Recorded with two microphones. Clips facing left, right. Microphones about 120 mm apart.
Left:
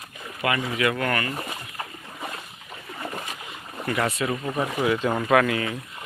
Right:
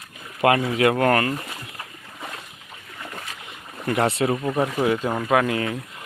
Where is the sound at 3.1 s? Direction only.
15° left (ahead or behind).